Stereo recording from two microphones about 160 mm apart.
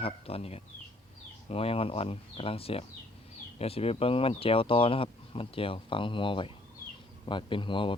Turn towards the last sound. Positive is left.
turn(degrees=30)  # may be behind; listen again after turning